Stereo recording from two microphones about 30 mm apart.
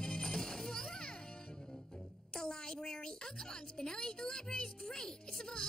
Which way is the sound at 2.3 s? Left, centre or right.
Left.